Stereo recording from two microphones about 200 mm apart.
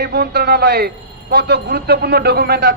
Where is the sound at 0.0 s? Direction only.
50° right (ahead or behind).